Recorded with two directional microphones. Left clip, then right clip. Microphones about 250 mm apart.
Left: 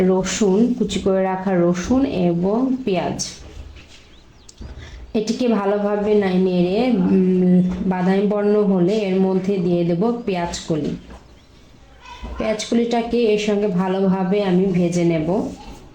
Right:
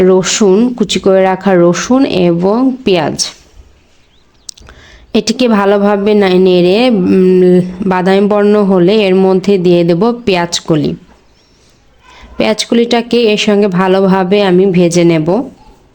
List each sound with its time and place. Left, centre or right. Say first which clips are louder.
0.0 s speech: right 10 dB; right
5.1 s speech: right 9 dB; right
12.4 s speech: right 10 dB; right